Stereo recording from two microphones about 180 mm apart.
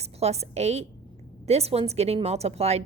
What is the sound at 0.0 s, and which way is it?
A woman's voice, 35° right (ahead or behind).